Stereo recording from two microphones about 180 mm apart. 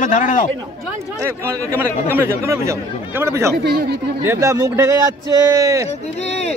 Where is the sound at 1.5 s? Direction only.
15° right (ahead or behind).